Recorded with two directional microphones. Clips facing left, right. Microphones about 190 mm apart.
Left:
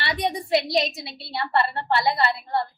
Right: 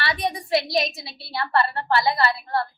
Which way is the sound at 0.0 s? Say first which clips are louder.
Even; 25° left (ahead or behind).